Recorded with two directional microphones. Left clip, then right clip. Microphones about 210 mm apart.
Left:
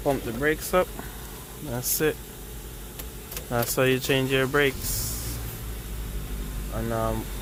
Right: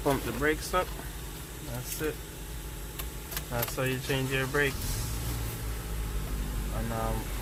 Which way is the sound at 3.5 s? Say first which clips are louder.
Left 9 dB; 45° left (ahead or behind).